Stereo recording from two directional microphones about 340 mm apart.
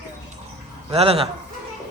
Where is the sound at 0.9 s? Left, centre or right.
Centre.